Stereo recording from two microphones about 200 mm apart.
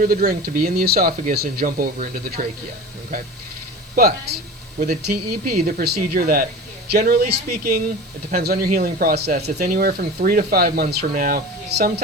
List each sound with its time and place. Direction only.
0.0 s speech: 45° right (ahead or behind)
3.9 s speech: 50° right (ahead or behind)